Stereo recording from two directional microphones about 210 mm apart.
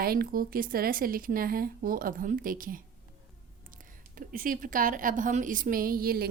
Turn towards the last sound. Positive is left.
turn(degrees=-45)  # may be behind; listen again after turning